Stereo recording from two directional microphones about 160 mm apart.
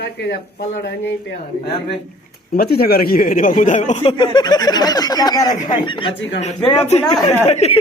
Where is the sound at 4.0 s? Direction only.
30° left (ahead or behind).